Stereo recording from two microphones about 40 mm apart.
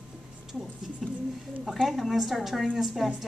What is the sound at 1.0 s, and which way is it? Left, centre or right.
A woman's voice, centre.